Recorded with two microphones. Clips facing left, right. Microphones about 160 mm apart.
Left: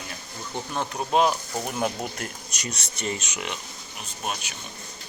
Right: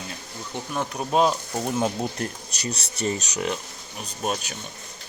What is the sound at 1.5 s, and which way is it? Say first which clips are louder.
A man's voice: right 3 dB; 25° right (ahead or behind).